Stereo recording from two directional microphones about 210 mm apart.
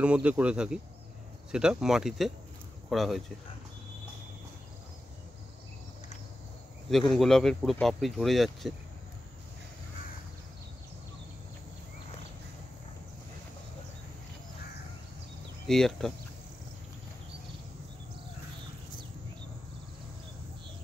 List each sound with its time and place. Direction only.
0.0 s speech: 5° right (ahead or behind)
6.9 s speech: centre (ahead or behind)
15.6 s speech: centre (ahead or behind)